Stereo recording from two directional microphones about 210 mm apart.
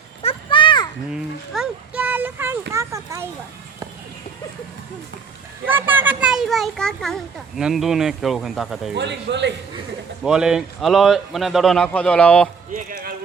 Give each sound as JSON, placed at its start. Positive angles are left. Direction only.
{"t": 0.2, "sound": "a sound", "side_deg": 25}
{"t": 1.1, "sound": "a sound", "side_deg": -5}
{"t": 5.6, "sound": "a child's voice", "side_deg": -10}
{"t": 9.0, "sound": "a man's voice", "side_deg": -55}
{"t": 10.2, "sound": "speech", "side_deg": -5}
{"t": 12.7, "sound": "chop", "side_deg": -40}